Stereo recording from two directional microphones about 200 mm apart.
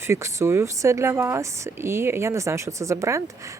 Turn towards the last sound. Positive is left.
turn(degrees=-15)  # may be behind; listen again after turning